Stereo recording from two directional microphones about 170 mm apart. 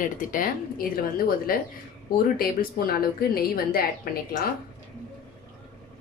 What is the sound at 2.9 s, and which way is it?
Speech, 60° left (ahead or behind).